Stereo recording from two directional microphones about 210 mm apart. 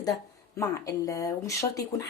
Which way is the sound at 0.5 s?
15° left (ahead or behind).